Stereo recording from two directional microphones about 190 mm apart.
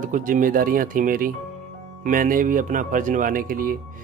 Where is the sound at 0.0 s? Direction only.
45° right (ahead or behind).